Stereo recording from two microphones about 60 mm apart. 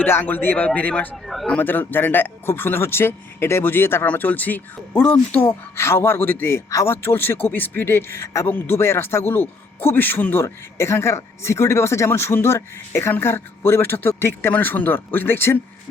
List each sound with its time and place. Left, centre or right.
0.0 s speech: left
1.1 s a man's voice: centre
1.5 s speech: left
4.0 s speech: left
5.7 s speech: left
10.4 s speech: left
14.5 s speech: left